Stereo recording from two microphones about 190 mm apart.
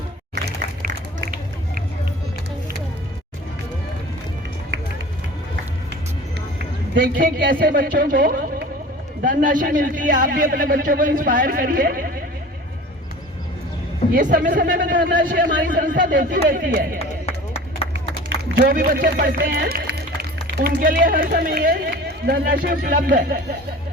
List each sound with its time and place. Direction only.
7.0 s speech: 45° right (ahead or behind)
14.2 s speech: 45° right (ahead or behind)
18.4 s a sound: 65° right (ahead or behind)
18.7 s speech: 50° right (ahead or behind)